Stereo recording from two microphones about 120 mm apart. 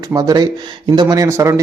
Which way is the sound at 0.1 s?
30° right (ahead or behind).